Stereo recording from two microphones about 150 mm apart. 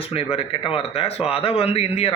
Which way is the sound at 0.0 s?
40° left (ahead or behind).